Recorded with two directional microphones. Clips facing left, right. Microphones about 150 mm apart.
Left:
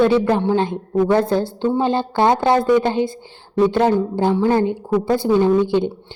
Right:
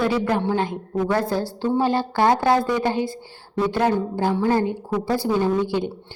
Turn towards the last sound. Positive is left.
turn(degrees=25)  # may be behind; listen again after turning